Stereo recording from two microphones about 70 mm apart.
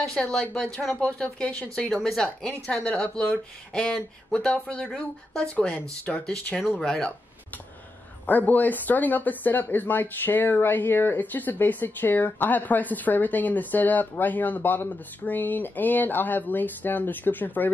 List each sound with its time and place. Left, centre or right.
0.0 s speech: centre
8.3 s speech: left